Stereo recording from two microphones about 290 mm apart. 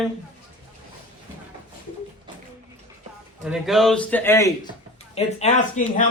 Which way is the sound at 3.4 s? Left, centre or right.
Centre.